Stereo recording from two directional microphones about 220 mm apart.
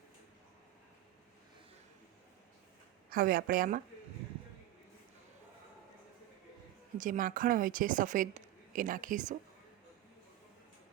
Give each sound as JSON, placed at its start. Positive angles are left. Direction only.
{"t": 3.1, "sound": "speech", "side_deg": -40}
{"t": 7.0, "sound": "speech", "side_deg": -40}